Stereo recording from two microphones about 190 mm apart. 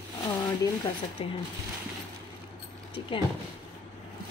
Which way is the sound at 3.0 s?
25° left (ahead or behind).